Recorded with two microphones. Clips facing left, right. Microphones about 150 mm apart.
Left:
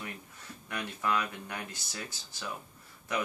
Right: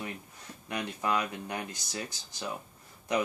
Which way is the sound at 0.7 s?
20° right (ahead or behind).